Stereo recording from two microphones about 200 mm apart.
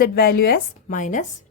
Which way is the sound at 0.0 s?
50° left (ahead or behind).